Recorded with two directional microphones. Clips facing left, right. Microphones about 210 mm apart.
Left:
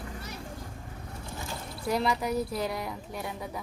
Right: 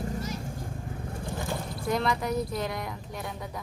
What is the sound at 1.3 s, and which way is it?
Vehicle, 55° right (ahead or behind).